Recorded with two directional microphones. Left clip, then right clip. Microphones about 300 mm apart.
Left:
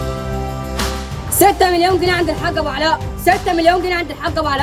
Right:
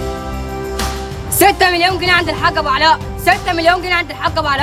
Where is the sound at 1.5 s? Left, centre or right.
Right.